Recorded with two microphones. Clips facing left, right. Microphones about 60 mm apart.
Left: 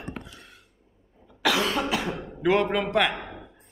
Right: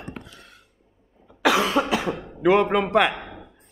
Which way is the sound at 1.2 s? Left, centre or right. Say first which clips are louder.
Right 4 dB; centre.